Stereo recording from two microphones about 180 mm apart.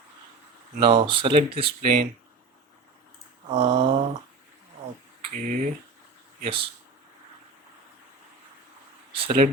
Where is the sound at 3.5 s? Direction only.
40° right (ahead or behind).